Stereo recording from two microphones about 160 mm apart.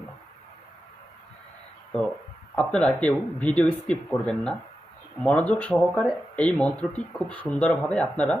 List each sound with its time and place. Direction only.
2.6 s speech: 5° left (ahead or behind)